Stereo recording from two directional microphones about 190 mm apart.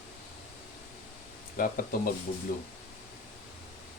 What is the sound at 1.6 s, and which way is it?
Speech, 50° left (ahead or behind).